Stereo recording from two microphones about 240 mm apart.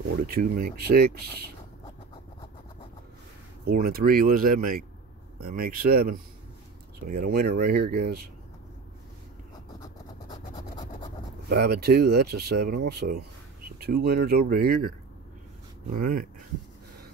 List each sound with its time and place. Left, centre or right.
0.2 s speech: right
3.6 s speech: right
11.4 s speech: right